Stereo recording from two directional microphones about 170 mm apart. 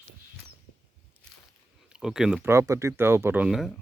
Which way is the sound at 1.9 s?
5° right (ahead or behind).